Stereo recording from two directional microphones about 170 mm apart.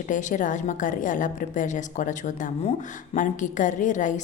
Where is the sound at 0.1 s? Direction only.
50° left (ahead or behind).